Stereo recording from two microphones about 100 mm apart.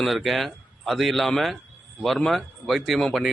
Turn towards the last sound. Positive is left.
turn(degrees=0)  # may be behind; listen again after turning